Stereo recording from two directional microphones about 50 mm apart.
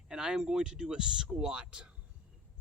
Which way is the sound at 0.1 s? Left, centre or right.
Centre.